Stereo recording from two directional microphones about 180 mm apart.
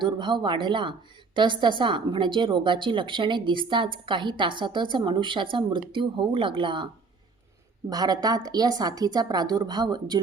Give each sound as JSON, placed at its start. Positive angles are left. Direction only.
{"t": 0.0, "sound": "a woman's voice", "side_deg": -25}